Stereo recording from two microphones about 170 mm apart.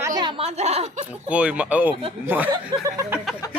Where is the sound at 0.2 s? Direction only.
30° right (ahead or behind).